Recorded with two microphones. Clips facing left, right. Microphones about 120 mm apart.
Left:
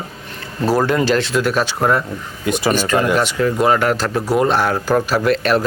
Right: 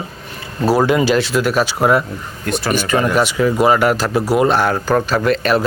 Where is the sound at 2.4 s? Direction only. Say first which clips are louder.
Left 3 dB; 10° left (ahead or behind).